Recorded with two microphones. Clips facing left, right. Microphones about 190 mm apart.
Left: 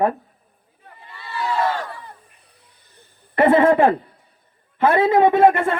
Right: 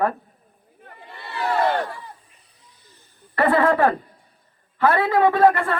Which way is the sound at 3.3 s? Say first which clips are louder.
Left 4 dB; 25° left (ahead or behind).